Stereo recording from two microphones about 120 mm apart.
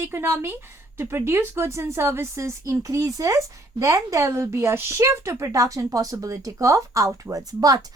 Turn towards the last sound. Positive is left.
turn(degrees=-30)  # may be behind; listen again after turning